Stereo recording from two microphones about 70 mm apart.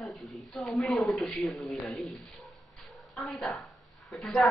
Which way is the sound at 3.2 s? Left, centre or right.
Centre.